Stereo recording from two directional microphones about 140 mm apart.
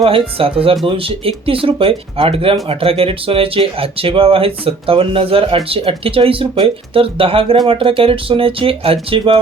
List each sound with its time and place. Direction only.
0.0 s speech: 40° right (ahead or behind)